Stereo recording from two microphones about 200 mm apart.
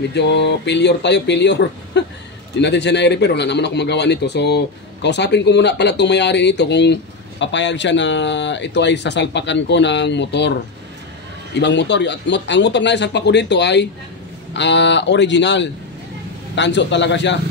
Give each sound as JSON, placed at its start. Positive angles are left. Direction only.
{"t": 0.1, "sound": "speech", "side_deg": 60}